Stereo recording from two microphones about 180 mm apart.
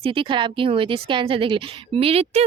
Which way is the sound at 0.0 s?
30° right (ahead or behind).